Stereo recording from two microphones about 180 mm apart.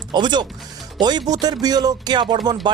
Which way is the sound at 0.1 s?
25° right (ahead or behind).